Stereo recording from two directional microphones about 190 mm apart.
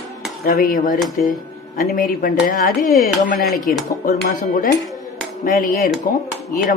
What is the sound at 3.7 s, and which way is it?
Speech, 50° left (ahead or behind).